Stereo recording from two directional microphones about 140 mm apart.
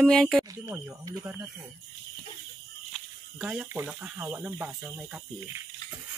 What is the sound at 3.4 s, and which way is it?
Speech, 5° right (ahead or behind).